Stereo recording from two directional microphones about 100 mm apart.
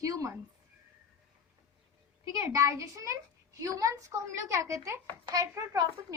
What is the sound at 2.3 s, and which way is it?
A woman's voice, 30° right (ahead or behind).